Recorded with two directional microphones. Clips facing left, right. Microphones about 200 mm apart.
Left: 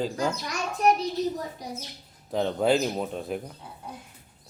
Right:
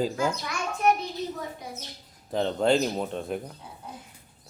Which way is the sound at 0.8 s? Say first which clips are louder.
Left 1 dB; 35° left (ahead or behind).